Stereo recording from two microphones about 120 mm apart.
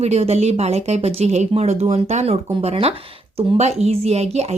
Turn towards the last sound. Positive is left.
turn(degrees=-60)  # may be behind; listen again after turning